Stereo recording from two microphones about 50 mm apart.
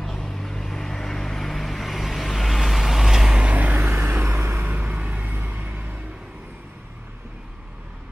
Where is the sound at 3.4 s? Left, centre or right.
Right.